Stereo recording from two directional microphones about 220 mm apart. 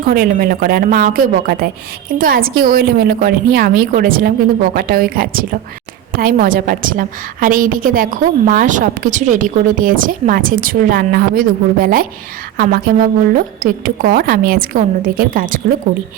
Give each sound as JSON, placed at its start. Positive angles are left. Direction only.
{"t": 0.1, "sound": "a woman's voice", "side_deg": -40}